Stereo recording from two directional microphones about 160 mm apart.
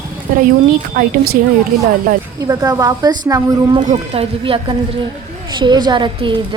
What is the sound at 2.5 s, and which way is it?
A woman's voice, 20° right (ahead or behind).